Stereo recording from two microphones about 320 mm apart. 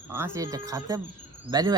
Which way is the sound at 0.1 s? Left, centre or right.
Centre.